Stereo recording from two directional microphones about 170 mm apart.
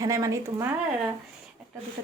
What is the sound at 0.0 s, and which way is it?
Speech, 20° right (ahead or behind).